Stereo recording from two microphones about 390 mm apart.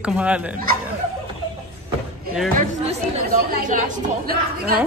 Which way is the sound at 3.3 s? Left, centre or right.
Right.